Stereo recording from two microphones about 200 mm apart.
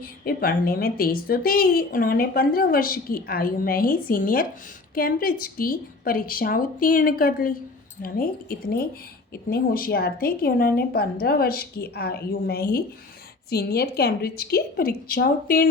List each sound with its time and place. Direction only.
0.0 s a woman's voice: 50° left (ahead or behind)